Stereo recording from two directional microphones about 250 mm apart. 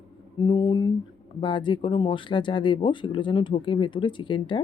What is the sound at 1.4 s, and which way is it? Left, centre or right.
Speech, centre.